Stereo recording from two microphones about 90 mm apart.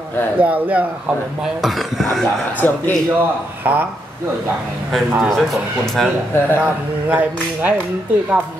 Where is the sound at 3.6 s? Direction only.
20° right (ahead or behind).